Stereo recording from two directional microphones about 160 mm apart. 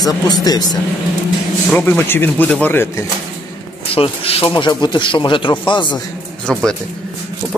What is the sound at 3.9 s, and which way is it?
Speech, 35° left (ahead or behind).